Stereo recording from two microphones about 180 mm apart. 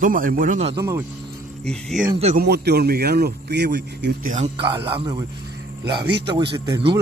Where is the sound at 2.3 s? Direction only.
65° right (ahead or behind).